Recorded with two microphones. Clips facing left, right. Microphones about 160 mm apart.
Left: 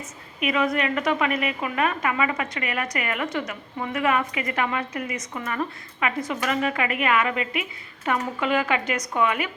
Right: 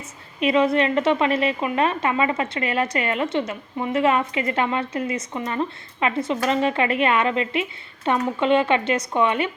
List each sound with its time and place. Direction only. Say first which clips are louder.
0.3 s a woman's voice: right 5 dB; 30° right (ahead or behind)